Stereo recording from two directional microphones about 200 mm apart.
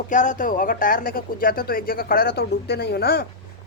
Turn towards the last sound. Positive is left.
turn(degrees=50)  # may be behind; listen again after turning